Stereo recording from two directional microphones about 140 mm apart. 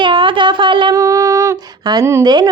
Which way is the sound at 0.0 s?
35° right (ahead or behind).